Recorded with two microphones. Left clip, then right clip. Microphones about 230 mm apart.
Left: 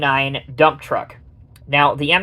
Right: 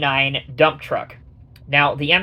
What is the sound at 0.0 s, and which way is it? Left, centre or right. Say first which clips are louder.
Speech: left 1 dB; left.